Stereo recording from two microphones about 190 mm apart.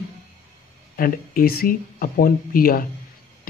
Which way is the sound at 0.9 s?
50° left (ahead or behind).